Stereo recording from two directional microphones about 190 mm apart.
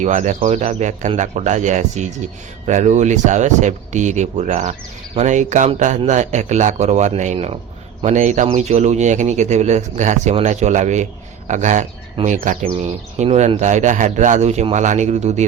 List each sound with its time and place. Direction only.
0.0 s speech: 40° right (ahead or behind)